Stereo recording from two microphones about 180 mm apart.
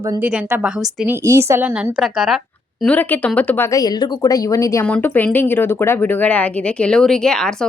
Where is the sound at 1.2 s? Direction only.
15° right (ahead or behind).